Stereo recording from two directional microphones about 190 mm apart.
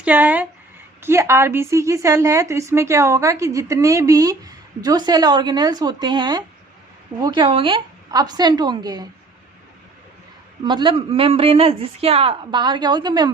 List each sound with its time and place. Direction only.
0.0 s a sound: 10° right (ahead or behind)
1.0 s a woman's voice: 15° right (ahead or behind)
10.6 s speech: 25° right (ahead or behind)